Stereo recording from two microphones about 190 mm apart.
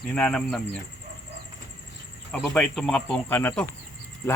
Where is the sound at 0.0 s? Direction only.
5° left (ahead or behind).